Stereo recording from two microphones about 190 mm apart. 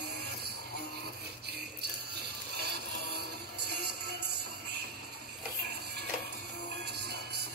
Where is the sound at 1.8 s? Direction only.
60° right (ahead or behind).